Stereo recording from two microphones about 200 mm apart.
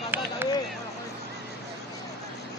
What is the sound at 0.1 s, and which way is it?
Run, 10° right (ahead or behind).